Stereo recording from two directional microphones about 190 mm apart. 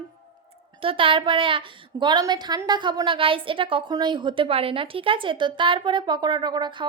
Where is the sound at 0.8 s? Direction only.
30° right (ahead or behind).